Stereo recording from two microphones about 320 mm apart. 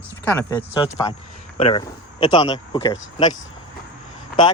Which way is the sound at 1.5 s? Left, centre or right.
Centre.